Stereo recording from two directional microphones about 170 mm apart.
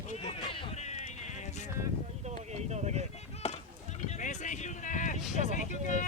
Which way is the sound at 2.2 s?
40° right (ahead or behind).